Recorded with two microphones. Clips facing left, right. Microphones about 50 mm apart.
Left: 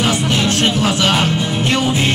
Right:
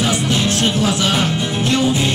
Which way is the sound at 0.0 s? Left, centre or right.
Left.